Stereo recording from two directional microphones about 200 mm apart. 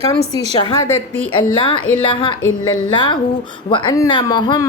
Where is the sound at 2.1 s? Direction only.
25° left (ahead or behind).